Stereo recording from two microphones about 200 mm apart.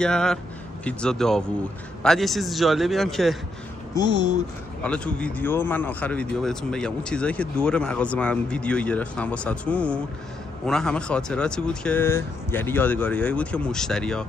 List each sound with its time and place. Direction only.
0.0 s speech: 5° left (ahead or behind)
3.9 s speech: 20° left (ahead or behind)
4.8 s speech: 5° left (ahead or behind)